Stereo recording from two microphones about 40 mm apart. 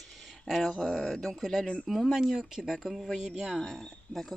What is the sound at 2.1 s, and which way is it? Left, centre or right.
Speech, centre.